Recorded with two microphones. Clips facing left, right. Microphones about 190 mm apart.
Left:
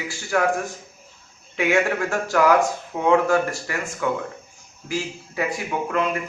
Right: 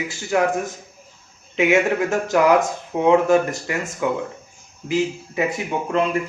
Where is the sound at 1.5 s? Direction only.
20° right (ahead or behind).